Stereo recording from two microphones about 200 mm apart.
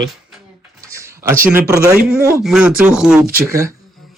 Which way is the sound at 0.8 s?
15° right (ahead or behind).